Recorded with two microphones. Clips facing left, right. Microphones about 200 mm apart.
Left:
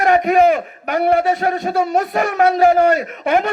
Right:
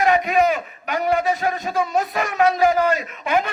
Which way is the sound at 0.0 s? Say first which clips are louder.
Left 5 dB; 50° left (ahead or behind).